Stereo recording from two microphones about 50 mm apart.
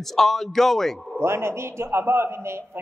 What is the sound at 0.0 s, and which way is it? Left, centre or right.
A man's voice, centre.